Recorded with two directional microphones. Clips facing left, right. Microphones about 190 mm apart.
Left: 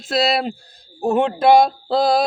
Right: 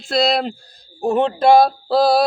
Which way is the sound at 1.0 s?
10° left (ahead or behind).